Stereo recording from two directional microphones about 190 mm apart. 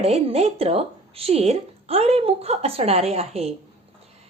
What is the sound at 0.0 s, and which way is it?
Speech, 30° right (ahead or behind).